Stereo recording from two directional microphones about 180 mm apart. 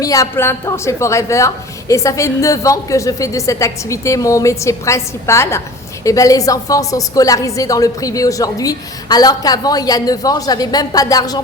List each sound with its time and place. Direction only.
0.0 s a woman's voice: 20° left (ahead or behind)